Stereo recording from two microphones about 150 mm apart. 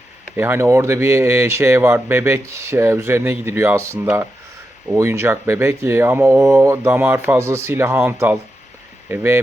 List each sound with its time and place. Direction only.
0.3 s speech: 15° right (ahead or behind)